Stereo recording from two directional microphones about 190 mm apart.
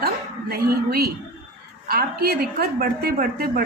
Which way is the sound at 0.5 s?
55° right (ahead or behind).